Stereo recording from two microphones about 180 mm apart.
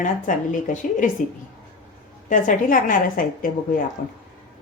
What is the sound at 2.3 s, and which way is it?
Speech, 50° left (ahead or behind).